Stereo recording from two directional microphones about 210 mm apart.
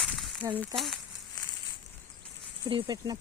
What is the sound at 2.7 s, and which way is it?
Speech, 20° right (ahead or behind).